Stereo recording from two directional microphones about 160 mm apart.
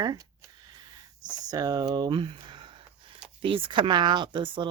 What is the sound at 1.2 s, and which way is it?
Speech, 25° right (ahead or behind).